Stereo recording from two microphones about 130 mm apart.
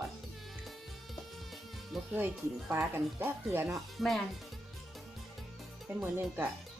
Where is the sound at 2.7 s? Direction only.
20° right (ahead or behind).